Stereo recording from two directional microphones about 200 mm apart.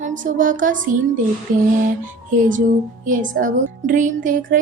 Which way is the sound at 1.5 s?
45° right (ahead or behind).